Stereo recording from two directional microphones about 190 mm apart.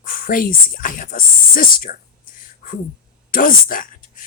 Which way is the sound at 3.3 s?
45° left (ahead or behind).